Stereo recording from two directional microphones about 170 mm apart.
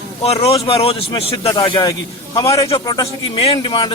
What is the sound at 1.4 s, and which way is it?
Speech, 20° left (ahead or behind).